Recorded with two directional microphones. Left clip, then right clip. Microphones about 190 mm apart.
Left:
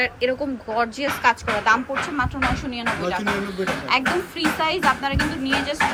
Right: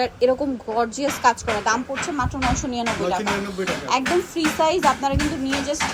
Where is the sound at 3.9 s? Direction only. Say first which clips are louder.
Right 1 dB; 20° right (ahead or behind).